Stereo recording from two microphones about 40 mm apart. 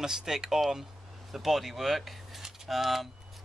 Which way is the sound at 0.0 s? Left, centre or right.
Centre.